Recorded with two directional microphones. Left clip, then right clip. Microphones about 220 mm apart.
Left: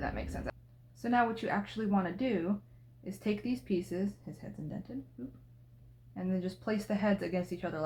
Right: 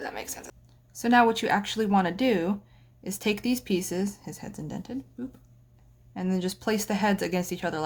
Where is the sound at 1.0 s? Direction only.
35° right (ahead or behind).